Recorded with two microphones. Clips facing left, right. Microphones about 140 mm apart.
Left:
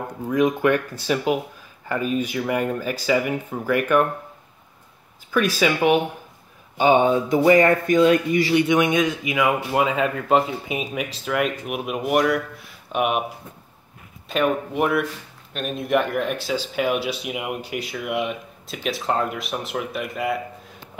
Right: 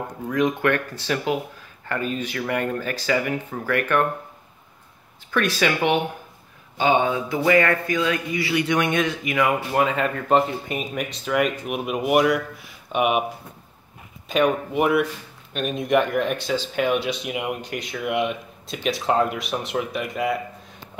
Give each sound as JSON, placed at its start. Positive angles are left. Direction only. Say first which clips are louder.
{"t": 0.3, "sound": "speech", "louder": "left 2 dB", "side_deg": 10}
{"t": 5.3, "sound": "speech", "louder": "left 2 dB", "side_deg": 10}
{"t": 6.8, "sound": "speech", "louder": "left 3 dB", "side_deg": 20}
{"t": 14.3, "sound": "speech", "louder": "right 1 dB", "side_deg": 0}